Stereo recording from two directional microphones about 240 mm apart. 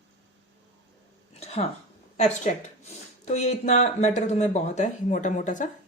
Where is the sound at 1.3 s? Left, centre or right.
Left.